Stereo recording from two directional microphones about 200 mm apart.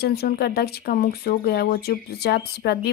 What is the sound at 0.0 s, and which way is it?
Speech, 50° left (ahead or behind).